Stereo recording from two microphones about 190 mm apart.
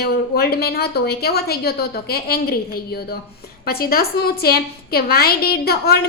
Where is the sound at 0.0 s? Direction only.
55° left (ahead or behind).